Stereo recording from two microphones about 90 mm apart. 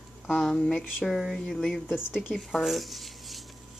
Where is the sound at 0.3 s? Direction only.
10° left (ahead or behind).